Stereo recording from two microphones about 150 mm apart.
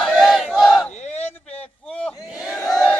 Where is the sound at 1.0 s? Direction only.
50° left (ahead or behind).